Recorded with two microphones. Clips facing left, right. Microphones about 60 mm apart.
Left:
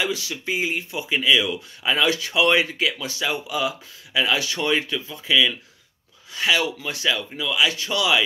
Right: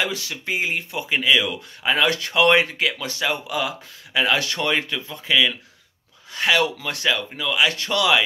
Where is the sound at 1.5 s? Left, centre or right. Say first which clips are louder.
Right 1 dB; right.